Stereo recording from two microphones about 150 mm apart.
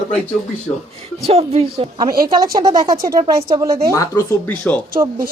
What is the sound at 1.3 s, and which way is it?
Speech, 40° right (ahead or behind).